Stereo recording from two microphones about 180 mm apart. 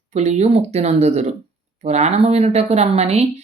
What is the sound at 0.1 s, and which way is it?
Speech, 40° right (ahead or behind).